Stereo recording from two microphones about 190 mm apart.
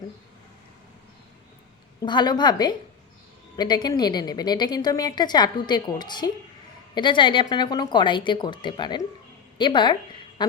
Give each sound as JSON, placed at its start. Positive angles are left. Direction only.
{"t": 2.0, "sound": "a woman's voice", "side_deg": 25}